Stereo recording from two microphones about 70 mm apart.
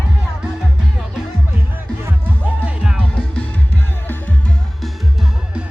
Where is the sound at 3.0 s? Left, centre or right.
Centre.